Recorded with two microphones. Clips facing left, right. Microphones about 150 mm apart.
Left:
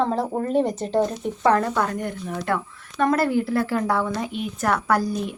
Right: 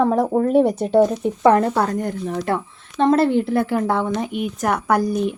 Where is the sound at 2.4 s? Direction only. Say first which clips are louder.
Right 3 dB; 25° right (ahead or behind).